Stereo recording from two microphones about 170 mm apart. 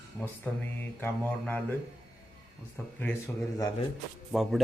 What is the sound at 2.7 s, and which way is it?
Speech, 10° left (ahead or behind).